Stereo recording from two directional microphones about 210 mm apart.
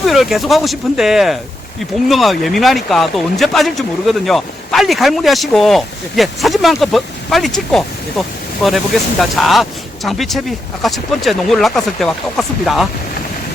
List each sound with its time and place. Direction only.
0.0 s speech: centre (ahead or behind)